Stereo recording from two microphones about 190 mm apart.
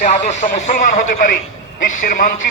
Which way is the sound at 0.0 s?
45° left (ahead or behind).